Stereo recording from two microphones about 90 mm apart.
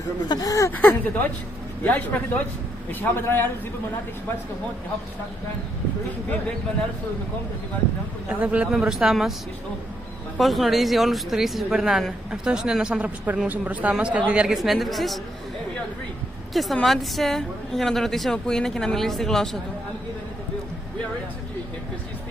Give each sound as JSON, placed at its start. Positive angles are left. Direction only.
{"t": 0.3, "sound": "speech", "side_deg": 40}
{"t": 0.7, "sound": "a man's voice", "side_deg": 20}
{"t": 8.3, "sound": "a woman's voice", "side_deg": -15}
{"t": 10.3, "sound": "a woman's voice", "side_deg": 0}
{"t": 16.7, "sound": "speech", "side_deg": 0}